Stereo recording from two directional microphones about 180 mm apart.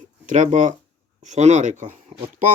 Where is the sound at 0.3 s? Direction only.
45° right (ahead or behind).